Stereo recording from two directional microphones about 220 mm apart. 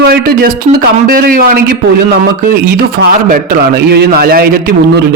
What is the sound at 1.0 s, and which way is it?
Speech, 40° right (ahead or behind).